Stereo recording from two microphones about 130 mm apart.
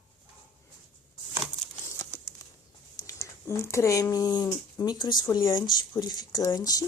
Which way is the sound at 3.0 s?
20° left (ahead or behind).